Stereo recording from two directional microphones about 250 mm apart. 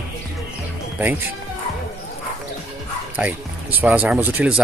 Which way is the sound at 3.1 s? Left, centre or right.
Centre.